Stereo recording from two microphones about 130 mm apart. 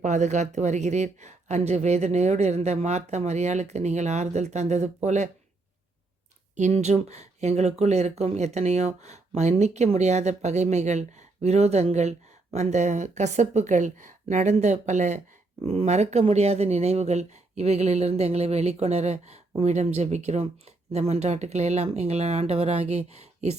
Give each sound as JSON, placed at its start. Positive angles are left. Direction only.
{"t": 0.0, "sound": "speech", "side_deg": -65}
{"t": 6.6, "sound": "speech", "side_deg": -60}
{"t": 15.6, "sound": "speech", "side_deg": -55}